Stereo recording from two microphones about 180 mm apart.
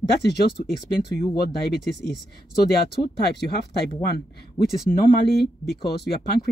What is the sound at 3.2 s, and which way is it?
Speech, 65° left (ahead or behind).